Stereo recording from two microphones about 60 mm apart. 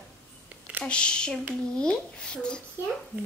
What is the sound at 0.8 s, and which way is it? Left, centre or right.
A child's voice, centre.